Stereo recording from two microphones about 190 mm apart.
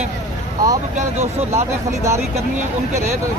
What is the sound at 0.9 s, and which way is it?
Speech, 35° right (ahead or behind).